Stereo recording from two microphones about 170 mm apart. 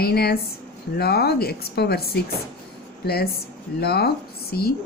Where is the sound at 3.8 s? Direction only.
70° left (ahead or behind).